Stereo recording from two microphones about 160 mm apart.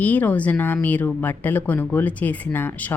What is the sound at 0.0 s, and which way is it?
A woman's voice, 10° left (ahead or behind).